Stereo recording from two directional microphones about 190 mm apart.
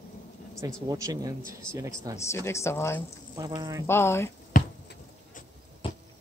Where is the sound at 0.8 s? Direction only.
15° right (ahead or behind).